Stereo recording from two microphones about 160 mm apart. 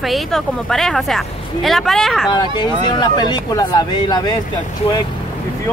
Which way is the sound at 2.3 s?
30° left (ahead or behind).